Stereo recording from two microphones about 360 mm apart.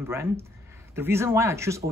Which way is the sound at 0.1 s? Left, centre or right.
Centre.